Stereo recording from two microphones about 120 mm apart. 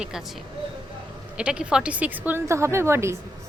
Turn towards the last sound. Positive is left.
turn(degrees=-20)  # may be behind; listen again after turning